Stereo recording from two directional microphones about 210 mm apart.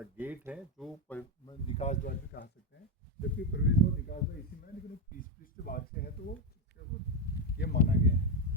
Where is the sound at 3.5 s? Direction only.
60° left (ahead or behind).